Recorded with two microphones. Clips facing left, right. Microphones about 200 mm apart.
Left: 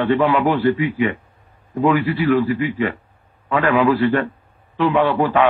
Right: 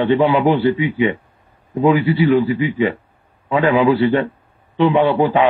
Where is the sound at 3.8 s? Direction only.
25° right (ahead or behind).